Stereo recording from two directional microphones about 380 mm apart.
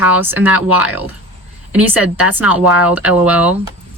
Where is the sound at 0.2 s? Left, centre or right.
Centre.